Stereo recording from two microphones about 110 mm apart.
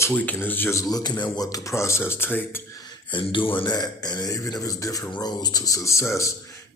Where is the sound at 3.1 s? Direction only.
50° left (ahead or behind).